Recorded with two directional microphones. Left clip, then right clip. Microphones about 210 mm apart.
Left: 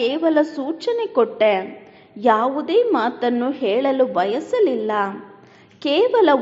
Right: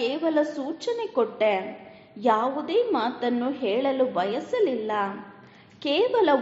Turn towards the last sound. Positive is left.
turn(degrees=25)  # may be behind; listen again after turning